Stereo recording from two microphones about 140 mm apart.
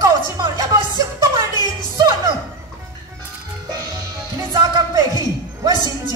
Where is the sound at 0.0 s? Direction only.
30° right (ahead or behind).